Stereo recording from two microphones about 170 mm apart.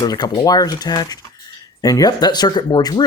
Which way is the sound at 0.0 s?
25° left (ahead or behind).